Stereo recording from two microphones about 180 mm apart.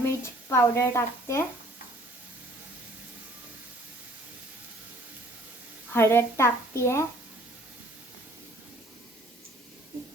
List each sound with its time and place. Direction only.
0.0 s speech: 15° left (ahead or behind)
5.9 s a woman's voice: 15° left (ahead or behind)